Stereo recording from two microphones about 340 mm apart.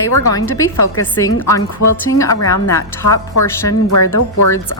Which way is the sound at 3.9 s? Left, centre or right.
Left.